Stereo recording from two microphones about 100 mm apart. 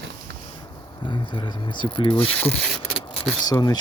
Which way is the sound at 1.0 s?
50° left (ahead or behind).